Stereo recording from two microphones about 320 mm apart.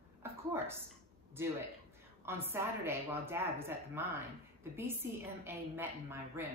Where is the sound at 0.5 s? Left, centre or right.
Centre.